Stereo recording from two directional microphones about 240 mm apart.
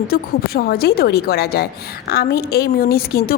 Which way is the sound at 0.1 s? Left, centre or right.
Left.